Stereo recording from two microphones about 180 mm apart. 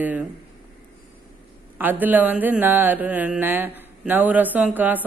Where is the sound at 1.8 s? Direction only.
10° right (ahead or behind).